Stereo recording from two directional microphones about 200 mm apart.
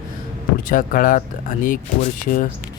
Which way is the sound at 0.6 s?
45° left (ahead or behind).